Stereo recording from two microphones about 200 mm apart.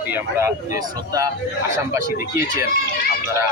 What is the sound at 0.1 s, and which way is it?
Speech, 15° right (ahead or behind).